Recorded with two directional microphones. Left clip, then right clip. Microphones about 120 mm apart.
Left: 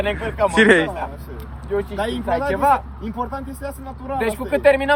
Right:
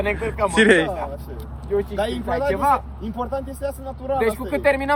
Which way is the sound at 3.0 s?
Centre (ahead or behind).